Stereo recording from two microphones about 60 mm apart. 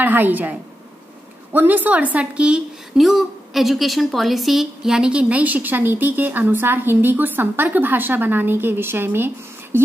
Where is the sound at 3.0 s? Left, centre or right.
Centre.